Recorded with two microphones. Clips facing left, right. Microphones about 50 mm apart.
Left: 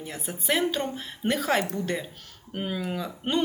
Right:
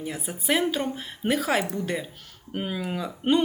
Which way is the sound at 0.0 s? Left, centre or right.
Centre.